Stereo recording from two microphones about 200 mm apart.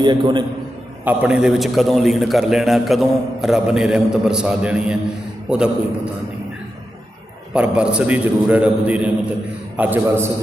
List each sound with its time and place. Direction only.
0.0 s a man's voice: 25° right (ahead or behind)
1.0 s a man's voice: 5° right (ahead or behind)
7.5 s a man's voice: 5° right (ahead or behind)